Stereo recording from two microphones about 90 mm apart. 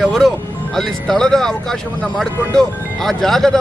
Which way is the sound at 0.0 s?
5° left (ahead or behind).